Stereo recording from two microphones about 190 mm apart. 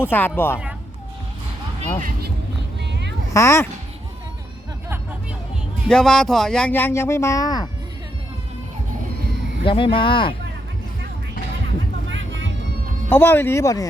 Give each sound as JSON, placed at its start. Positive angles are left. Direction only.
{"t": 0.0, "sound": "speech", "side_deg": 10}
{"t": 2.0, "sound": "speech", "side_deg": -45}
{"t": 2.8, "sound": "a sound", "side_deg": -65}
{"t": 3.2, "sound": "speech", "side_deg": 15}
{"t": 5.9, "sound": "speech", "side_deg": 5}
{"t": 9.6, "sound": "speech", "side_deg": 25}
{"t": 12.1, "sound": "vehicle", "side_deg": -80}
{"t": 13.1, "sound": "speech", "side_deg": 10}